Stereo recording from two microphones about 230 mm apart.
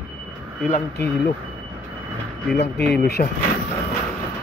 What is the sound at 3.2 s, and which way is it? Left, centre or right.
Speech, left.